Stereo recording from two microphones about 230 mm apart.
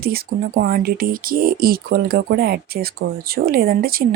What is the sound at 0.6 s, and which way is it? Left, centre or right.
Speech, right.